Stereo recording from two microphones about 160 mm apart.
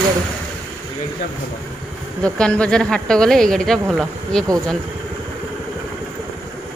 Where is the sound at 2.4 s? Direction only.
5° left (ahead or behind).